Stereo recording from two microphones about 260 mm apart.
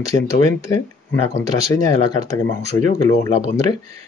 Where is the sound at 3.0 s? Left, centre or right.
Centre.